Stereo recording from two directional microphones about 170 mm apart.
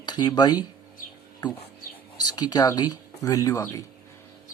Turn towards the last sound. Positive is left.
turn(degrees=20)  # may be behind; listen again after turning